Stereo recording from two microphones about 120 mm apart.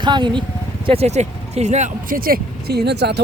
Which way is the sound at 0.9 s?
65° right (ahead or behind).